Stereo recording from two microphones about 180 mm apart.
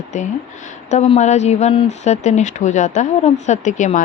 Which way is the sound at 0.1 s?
40° left (ahead or behind).